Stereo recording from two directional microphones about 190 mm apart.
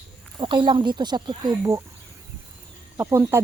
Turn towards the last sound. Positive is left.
turn(degrees=-15)  # may be behind; listen again after turning